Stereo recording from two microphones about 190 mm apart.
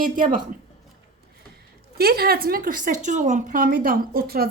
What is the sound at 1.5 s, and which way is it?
A woman's voice, 55° right (ahead or behind).